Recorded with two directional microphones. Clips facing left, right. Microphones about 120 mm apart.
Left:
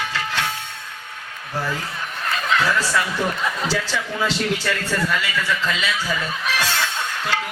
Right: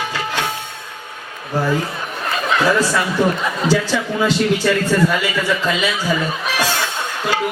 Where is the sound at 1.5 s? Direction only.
40° right (ahead or behind).